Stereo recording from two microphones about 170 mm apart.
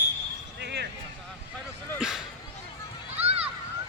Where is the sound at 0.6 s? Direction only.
80° right.